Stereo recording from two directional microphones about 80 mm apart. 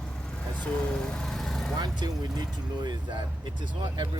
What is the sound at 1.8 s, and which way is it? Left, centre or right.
Speech, right.